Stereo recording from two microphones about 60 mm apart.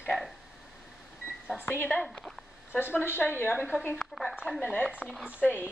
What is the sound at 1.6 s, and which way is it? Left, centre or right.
Speech, left.